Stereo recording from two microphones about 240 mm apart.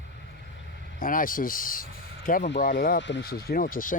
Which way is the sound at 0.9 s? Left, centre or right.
Left.